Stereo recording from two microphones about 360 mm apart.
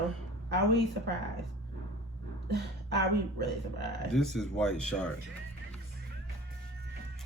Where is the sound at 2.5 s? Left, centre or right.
Right.